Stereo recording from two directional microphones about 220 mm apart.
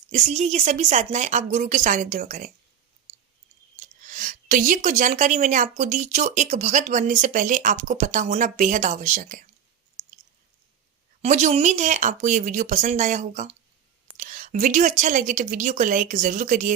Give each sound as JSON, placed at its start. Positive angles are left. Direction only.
{"t": 0.1, "sound": "a woman's voice", "side_deg": -30}
{"t": 4.0, "sound": "a woman's voice", "side_deg": -35}
{"t": 10.0, "sound": "chewing", "side_deg": -35}
{"t": 11.2, "sound": "a woman's voice", "side_deg": -30}